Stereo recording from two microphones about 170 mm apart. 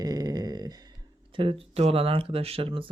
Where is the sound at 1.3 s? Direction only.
35° right (ahead or behind).